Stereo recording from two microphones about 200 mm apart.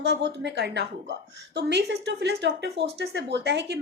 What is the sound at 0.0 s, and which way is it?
A woman's voice, 55° right (ahead or behind).